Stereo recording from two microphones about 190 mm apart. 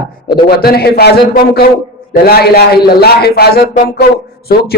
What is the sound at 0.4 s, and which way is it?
A man's voice, 55° left (ahead or behind).